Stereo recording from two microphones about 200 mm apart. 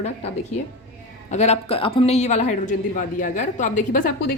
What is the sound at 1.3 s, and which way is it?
A woman's voice, 35° left (ahead or behind).